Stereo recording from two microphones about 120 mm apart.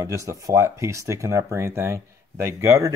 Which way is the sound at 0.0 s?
30° right (ahead or behind).